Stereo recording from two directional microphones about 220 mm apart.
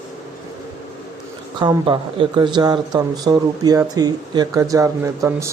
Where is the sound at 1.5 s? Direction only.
20° right (ahead or behind).